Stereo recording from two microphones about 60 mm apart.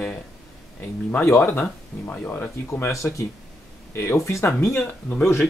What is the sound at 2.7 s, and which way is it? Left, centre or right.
Speech, left.